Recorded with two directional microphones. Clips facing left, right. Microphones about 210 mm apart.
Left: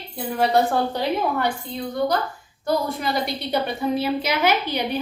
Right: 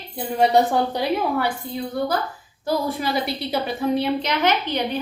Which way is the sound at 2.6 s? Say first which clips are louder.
Even; centre (ahead or behind).